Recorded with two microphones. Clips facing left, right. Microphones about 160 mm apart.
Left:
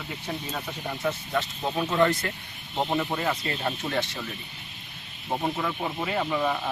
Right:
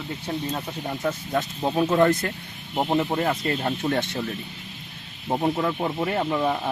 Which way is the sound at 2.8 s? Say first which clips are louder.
Right 6 dB; 25° right (ahead or behind).